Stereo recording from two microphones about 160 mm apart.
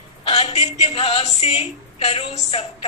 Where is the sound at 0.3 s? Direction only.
40° left (ahead or behind).